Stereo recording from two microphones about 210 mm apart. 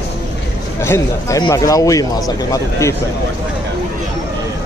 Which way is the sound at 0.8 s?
15° left (ahead or behind).